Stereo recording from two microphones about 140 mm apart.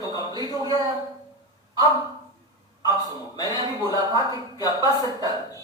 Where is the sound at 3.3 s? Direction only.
30° left (ahead or behind).